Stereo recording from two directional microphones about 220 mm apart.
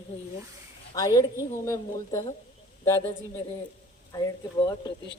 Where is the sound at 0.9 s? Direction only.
15° left (ahead or behind).